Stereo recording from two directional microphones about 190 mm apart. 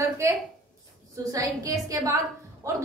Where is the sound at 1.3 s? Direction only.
20° right (ahead or behind).